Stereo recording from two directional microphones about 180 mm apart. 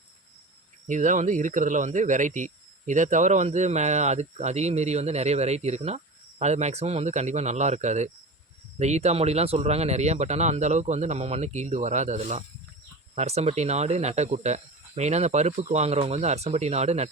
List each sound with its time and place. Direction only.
0.9 s speech: 45° right (ahead or behind)